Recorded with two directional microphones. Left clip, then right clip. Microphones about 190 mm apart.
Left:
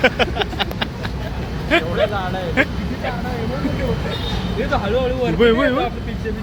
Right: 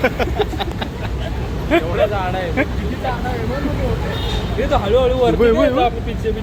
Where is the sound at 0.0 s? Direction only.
5° left (ahead or behind).